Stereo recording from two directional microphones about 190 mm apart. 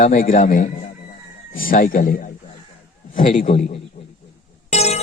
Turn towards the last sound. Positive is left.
turn(degrees=35)  # may be behind; listen again after turning